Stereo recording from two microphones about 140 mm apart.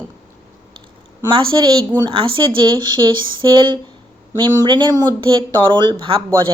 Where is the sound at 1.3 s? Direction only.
35° right (ahead or behind).